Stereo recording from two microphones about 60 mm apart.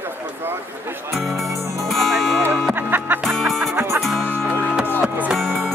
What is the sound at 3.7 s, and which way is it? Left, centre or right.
Music, right.